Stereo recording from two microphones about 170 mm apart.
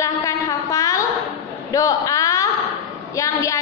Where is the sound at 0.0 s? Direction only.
20° left (ahead or behind).